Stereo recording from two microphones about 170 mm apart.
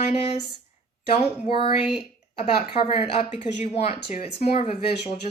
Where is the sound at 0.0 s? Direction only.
35° left (ahead or behind).